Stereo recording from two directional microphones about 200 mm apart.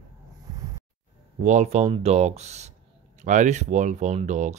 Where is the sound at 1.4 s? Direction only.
35° right (ahead or behind).